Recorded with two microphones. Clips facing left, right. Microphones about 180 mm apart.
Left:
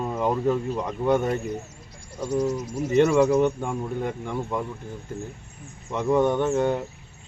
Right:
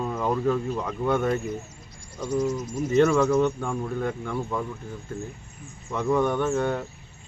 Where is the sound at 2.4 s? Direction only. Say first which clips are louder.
Left 1 dB; 35° left (ahead or behind).